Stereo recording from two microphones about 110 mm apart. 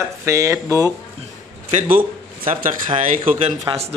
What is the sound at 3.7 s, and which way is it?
Speech, 40° right (ahead or behind).